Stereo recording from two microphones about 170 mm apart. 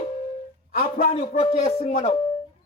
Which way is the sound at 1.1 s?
35° left (ahead or behind).